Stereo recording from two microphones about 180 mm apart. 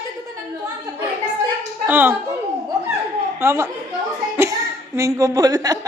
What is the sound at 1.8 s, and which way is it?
Speech, 10° right (ahead or behind).